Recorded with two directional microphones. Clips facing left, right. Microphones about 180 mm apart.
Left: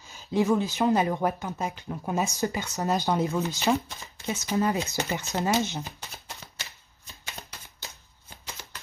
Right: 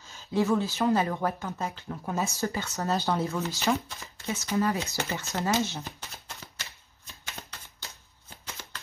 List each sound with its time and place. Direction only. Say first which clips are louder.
0.0 s speech: left 2 dB; 15° left (ahead or behind)